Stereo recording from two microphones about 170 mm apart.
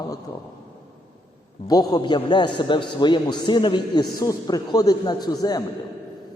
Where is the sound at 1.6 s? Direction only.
25° left (ahead or behind).